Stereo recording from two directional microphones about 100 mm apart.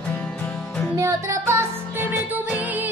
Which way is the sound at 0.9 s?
30° right (ahead or behind).